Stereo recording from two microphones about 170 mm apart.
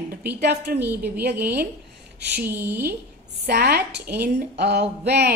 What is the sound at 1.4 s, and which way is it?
Speech, 65° right (ahead or behind).